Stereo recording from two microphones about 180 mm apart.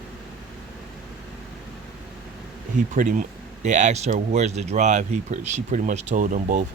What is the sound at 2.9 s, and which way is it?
Speech, 45° right (ahead or behind).